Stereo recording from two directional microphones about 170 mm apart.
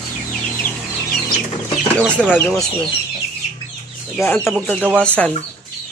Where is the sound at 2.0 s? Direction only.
5° right (ahead or behind).